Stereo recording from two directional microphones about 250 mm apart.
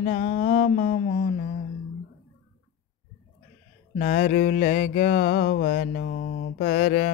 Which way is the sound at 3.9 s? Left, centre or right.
Left.